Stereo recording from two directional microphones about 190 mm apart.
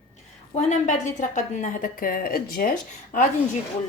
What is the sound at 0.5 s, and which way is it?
A woman's voice, 40° left (ahead or behind).